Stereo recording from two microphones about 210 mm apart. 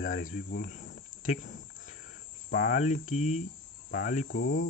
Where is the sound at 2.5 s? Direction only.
40° left (ahead or behind).